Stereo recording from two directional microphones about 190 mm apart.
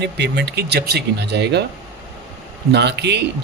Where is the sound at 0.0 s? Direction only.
65° right (ahead or behind).